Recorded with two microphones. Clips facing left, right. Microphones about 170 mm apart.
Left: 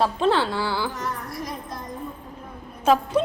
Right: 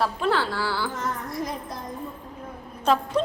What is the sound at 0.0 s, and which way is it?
Speech, 25° left (ahead or behind).